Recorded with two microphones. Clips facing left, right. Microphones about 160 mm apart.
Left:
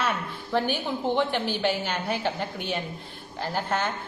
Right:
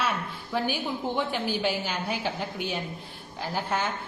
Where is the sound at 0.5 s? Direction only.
5° right (ahead or behind).